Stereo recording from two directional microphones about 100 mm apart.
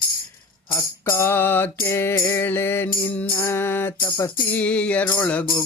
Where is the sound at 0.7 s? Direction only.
25° left (ahead or behind).